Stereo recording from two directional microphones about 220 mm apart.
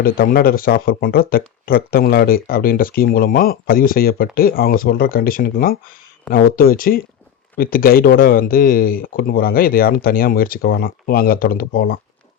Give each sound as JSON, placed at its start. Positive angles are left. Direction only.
{"t": 0.0, "sound": "speech", "side_deg": 40}